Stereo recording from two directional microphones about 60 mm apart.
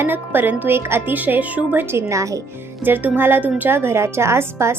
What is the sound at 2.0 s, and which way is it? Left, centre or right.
Speech, right.